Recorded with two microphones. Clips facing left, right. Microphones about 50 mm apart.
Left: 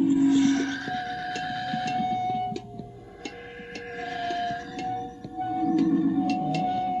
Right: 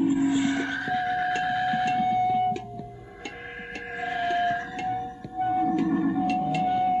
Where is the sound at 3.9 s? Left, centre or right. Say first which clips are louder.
Right 4 dB; centre.